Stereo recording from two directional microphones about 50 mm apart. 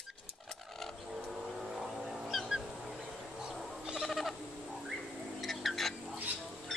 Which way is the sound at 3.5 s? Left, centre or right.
Centre.